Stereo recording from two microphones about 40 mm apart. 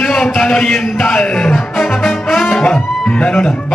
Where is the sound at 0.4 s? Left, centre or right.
Centre.